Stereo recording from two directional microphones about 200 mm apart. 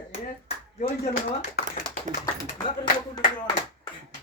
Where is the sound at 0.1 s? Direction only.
40° left (ahead or behind).